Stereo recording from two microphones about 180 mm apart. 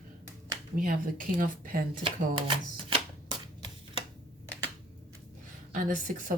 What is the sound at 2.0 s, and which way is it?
Speech, 30° right (ahead or behind).